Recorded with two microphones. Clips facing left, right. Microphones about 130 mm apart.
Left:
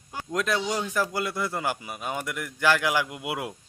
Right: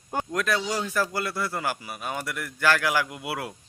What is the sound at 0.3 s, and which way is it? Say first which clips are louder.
A man's voice: left 2 dB; 20° left (ahead or behind).